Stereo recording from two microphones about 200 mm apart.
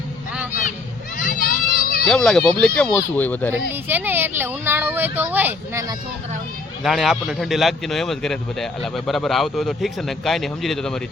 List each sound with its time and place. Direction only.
1.2 s a sound: 45° left (ahead or behind)
2.0 s speech: centre (ahead or behind)
3.7 s speech: 10° right (ahead or behind)
6.8 s speech: centre (ahead or behind)